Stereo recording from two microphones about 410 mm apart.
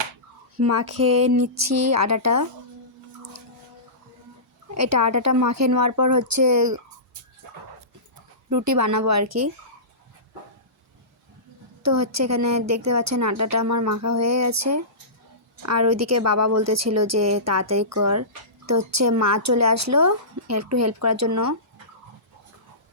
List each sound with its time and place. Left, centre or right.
0.5 s a woman's voice: right
4.7 s speech: right
8.4 s speech: right
11.8 s a woman's voice: right